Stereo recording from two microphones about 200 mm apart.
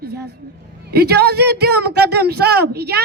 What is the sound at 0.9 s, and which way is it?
Speech, 55° right (ahead or behind).